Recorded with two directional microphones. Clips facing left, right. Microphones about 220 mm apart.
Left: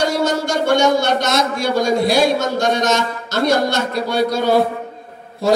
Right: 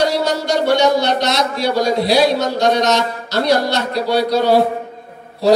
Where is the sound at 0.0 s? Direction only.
50° left (ahead or behind).